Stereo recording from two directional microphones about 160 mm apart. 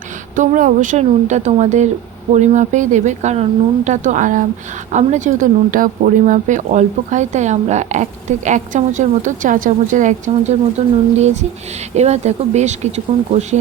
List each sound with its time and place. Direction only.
0.3 s speech: 55° right (ahead or behind)